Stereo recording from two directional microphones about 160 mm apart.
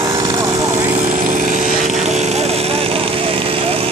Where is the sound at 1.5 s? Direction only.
50° right (ahead or behind).